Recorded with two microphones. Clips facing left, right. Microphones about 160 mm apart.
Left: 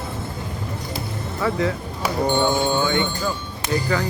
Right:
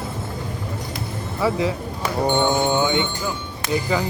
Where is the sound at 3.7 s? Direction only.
15° right (ahead or behind).